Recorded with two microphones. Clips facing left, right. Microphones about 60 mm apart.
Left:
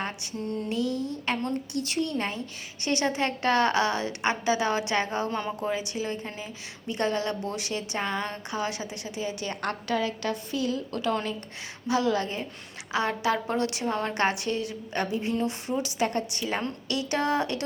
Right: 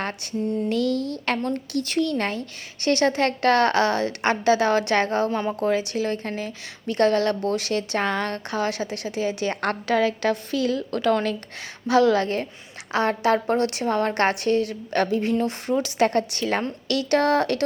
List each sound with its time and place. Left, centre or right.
0.0 s a sound: right
0.9 s a woman's voice: right
1.5 s a woman's voice: right
5.3 s a woman's voice: right
5.5 s a woman's voice: right
9.4 s a woman's voice: right
11.9 s a woman's voice: right
12.9 s a woman's voice: right